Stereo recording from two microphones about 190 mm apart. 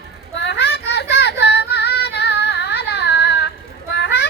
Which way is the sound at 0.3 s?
60° left (ahead or behind).